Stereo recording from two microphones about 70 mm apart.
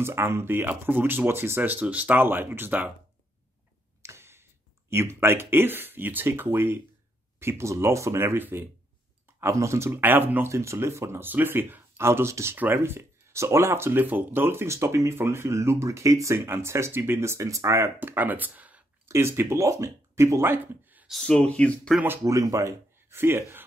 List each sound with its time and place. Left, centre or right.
0.0 s speech: right
4.0 s speech: right
9.5 s speech: right
19.0 s speech: right
21.3 s speech: centre
22.2 s speech: right
23.1 s speech: right